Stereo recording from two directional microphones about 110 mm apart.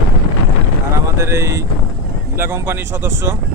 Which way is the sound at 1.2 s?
25° right (ahead or behind).